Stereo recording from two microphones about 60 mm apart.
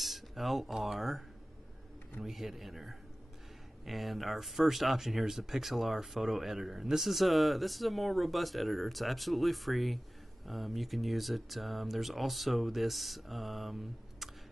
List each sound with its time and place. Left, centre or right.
0.0 s speech: centre
2.2 s speech: centre